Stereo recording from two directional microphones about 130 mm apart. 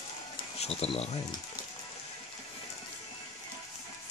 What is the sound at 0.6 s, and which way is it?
Speech, 50° left (ahead or behind).